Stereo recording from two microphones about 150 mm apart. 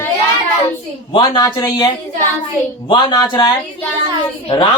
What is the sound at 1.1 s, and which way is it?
Speech, 30° left (ahead or behind).